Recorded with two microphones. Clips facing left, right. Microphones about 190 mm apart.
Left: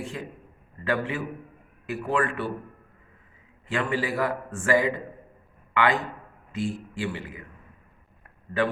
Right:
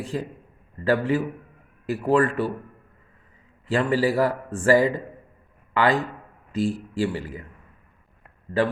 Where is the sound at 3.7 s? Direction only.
35° right (ahead or behind).